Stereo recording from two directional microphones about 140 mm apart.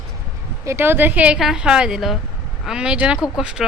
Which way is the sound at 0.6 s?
20° right (ahead or behind).